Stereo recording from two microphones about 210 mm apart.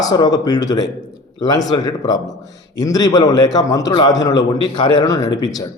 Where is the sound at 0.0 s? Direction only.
20° left (ahead or behind).